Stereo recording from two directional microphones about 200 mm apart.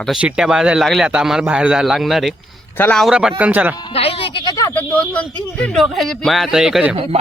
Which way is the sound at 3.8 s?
25° left (ahead or behind).